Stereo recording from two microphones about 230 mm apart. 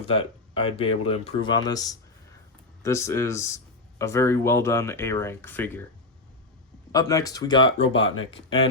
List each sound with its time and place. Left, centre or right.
0.0 s speech: left
6.9 s speech: centre
7.9 s speech: left